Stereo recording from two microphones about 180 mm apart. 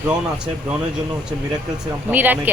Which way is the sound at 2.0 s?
10° right (ahead or behind).